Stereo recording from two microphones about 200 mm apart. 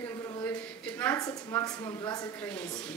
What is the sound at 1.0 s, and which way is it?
A woman's voice, 15° left (ahead or behind).